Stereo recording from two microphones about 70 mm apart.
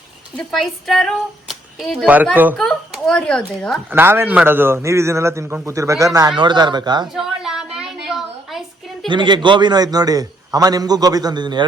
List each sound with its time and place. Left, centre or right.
0.3 s speech: centre
2.3 s speech: right
3.1 s speech: centre
3.8 s speech: right
4.8 s a man's voice: right
6.1 s speech: right
7.1 s a sound: centre
9.0 s a man's voice: right